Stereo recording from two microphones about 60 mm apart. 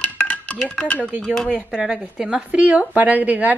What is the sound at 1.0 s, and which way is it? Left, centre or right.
Speech, right.